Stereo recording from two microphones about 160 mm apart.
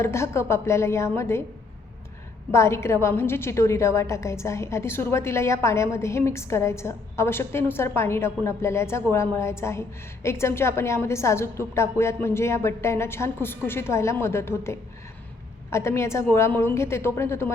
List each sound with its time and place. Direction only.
0.0 s a woman's voice: 15° left (ahead or behind)
2.5 s a woman's voice: 15° left (ahead or behind)